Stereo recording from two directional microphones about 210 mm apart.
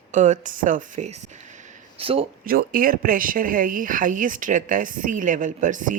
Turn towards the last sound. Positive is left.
turn(degrees=-35)  # may be behind; listen again after turning